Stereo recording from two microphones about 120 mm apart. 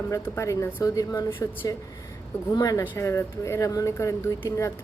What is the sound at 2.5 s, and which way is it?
Speech, 30° left (ahead or behind).